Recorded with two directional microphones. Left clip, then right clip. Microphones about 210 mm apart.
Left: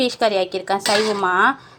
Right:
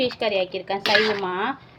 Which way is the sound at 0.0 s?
20° left (ahead or behind).